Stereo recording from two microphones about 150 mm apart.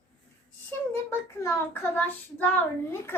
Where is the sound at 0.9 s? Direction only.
20° left (ahead or behind).